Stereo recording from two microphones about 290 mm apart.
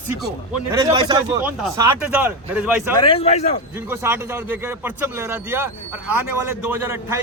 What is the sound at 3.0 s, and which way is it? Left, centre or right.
Speech, centre.